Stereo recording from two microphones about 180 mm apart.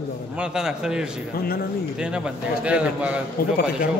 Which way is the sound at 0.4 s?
5° right (ahead or behind).